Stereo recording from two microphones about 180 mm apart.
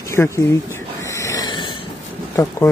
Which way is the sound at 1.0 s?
15° left (ahead or behind).